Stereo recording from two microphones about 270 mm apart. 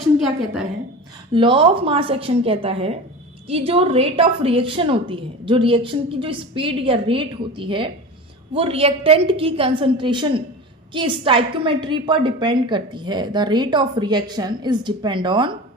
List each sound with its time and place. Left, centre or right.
0.0 s a woman's voice: centre
1.3 s a woman's voice: centre